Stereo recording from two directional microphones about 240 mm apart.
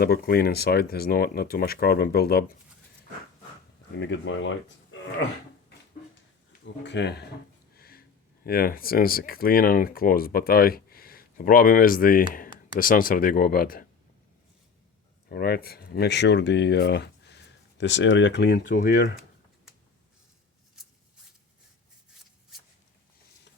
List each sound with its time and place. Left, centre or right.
0.0 s speech: left
3.9 s speech: left
6.8 s speech: left
7.8 s sniff: left
8.4 s speech: left
15.3 s speech: left